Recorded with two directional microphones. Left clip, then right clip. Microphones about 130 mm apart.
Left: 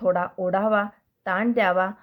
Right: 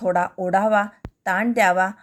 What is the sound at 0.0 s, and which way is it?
A woman's voice, 30° right (ahead or behind).